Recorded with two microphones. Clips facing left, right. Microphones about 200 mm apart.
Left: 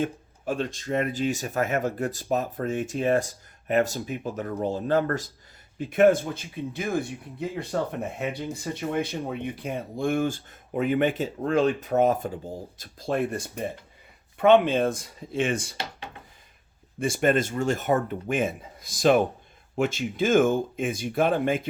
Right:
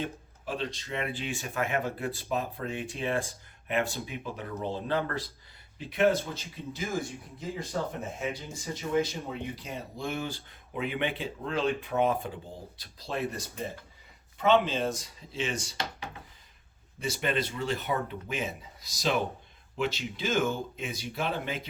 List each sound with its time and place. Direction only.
0.0 s speech: 45° left (ahead or behind)
17.0 s speech: 50° left (ahead or behind)